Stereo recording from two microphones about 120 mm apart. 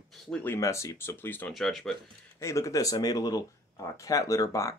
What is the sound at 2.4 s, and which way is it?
Speech, 25° left (ahead or behind).